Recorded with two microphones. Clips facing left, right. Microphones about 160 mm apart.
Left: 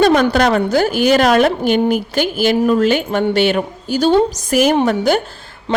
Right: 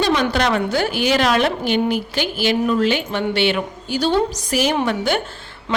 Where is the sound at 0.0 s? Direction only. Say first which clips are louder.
Left 6 dB; 50° left (ahead or behind).